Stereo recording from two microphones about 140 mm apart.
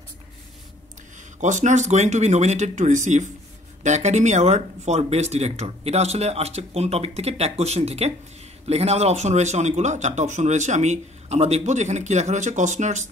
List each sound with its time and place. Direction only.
1.4 s speech: 60° right (ahead or behind)